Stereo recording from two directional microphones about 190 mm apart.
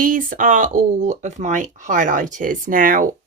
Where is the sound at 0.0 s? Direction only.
45° right (ahead or behind).